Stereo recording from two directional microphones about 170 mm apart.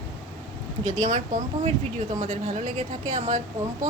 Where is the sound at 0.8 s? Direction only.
45° right (ahead or behind).